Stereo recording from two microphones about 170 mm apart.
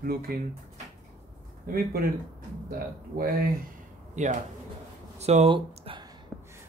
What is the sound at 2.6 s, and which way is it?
Speech, 55° right (ahead or behind).